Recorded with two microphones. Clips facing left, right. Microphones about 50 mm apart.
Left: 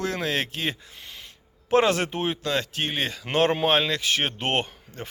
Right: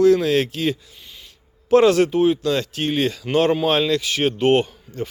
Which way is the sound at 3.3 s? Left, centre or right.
Left.